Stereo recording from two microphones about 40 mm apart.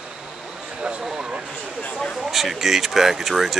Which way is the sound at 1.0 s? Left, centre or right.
Centre.